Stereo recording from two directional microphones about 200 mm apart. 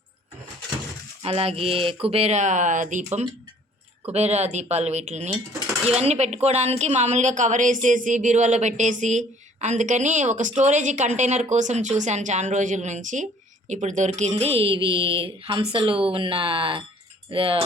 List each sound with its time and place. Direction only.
1.2 s speech: 30° right (ahead or behind)
4.1 s speech: 35° right (ahead or behind)